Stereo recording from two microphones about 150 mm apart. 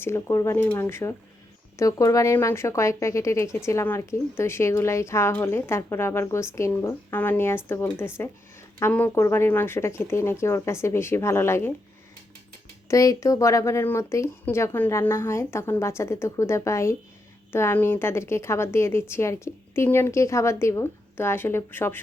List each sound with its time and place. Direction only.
0.0 s speech: 15° left (ahead or behind)
12.9 s speech: 20° left (ahead or behind)